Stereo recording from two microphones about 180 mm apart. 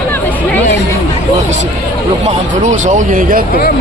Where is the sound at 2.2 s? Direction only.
40° right (ahead or behind).